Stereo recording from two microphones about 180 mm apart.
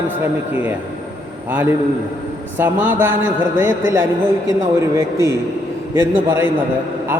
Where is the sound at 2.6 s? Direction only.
10° right (ahead or behind).